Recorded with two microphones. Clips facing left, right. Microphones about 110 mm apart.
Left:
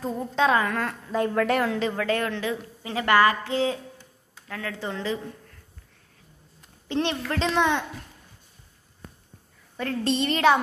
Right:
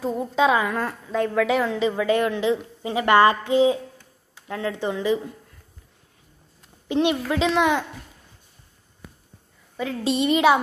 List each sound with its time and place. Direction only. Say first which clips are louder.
0.0 s a woman's voice: right 3 dB; 5° right (ahead or behind)
1.1 s a woman's voice: right 2 dB; centre (ahead or behind)
2.0 s a woman's voice: right 5 dB; 15° right (ahead or behind)
6.9 s a woman's voice: right 5 dB; 10° right (ahead or behind)
9.8 s a woman's voice: right 2 dB; 5° right (ahead or behind)